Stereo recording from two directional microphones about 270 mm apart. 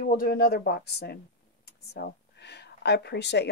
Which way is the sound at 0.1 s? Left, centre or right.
Left.